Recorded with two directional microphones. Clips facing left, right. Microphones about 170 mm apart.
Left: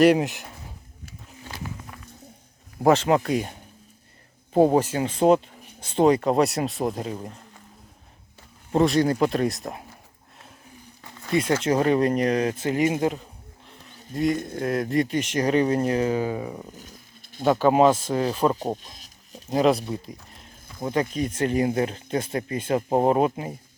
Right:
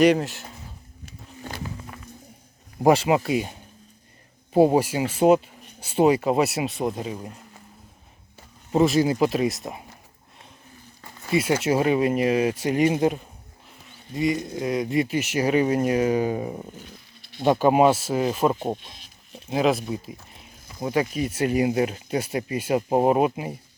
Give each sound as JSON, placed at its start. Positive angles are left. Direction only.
{"t": 0.0, "sound": "speech", "side_deg": 10}
{"t": 2.8, "sound": "speech", "side_deg": -10}
{"t": 4.5, "sound": "speech", "side_deg": -10}
{"t": 8.7, "sound": "speech", "side_deg": -5}
{"t": 11.0, "sound": "speech", "side_deg": -5}
{"t": 14.1, "sound": "speech", "side_deg": 0}
{"t": 16.7, "sound": "a sound", "side_deg": 40}
{"t": 17.4, "sound": "speech", "side_deg": -15}
{"t": 18.8, "sound": "a sound", "side_deg": 40}
{"t": 19.5, "sound": "speech", "side_deg": 0}